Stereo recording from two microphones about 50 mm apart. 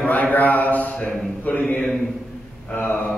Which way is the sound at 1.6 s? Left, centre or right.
Centre.